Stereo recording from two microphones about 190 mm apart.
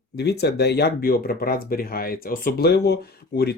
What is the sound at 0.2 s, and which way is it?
Speech, 60° left (ahead or behind).